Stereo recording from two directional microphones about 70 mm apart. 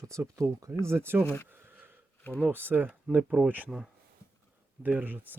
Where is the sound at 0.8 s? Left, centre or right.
Right.